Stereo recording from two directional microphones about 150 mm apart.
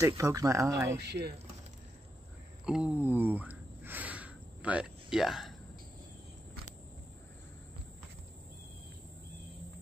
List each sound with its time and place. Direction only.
0.0 s speech: 20° right (ahead or behind)
1.0 s speech: 90° right
2.6 s a sound: 5° right (ahead or behind)